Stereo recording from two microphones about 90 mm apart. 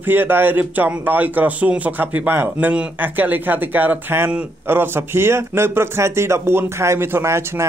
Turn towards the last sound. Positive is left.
turn(degrees=-30)  # may be behind; listen again after turning